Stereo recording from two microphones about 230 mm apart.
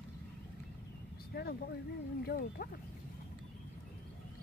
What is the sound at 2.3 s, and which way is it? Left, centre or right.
Speech, left.